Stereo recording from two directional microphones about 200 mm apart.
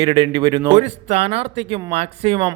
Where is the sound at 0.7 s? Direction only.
35° right (ahead or behind).